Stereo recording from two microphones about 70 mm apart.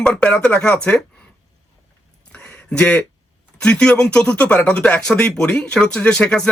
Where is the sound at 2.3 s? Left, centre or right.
Left.